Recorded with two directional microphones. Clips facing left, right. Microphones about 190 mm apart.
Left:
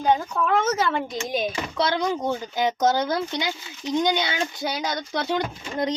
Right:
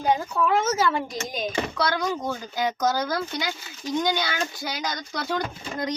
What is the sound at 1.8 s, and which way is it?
Speech, 20° left (ahead or behind).